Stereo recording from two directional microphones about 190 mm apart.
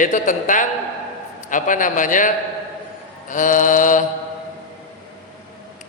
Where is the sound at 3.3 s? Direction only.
45° left (ahead or behind).